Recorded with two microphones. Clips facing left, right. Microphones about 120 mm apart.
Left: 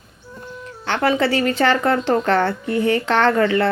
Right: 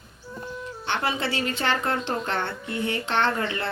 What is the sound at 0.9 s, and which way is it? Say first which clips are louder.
Speech: left 9 dB; 90° left.